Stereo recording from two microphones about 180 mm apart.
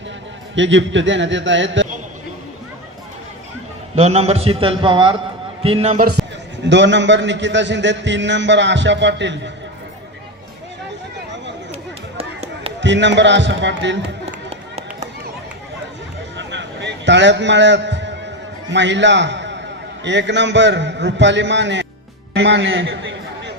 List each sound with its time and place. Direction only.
0.5 s a man's voice: 90° right
3.9 s a man's voice: 35° right (ahead or behind)
6.7 s a man's voice: 80° right
11.7 s a sound: 35° right (ahead or behind)
12.8 s a man's voice: 80° right
16.4 s music: 80° right
18.7 s a man's voice: 80° right